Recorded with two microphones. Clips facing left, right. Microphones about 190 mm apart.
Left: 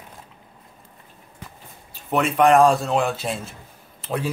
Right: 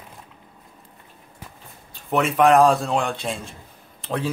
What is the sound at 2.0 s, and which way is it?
Speech, centre (ahead or behind).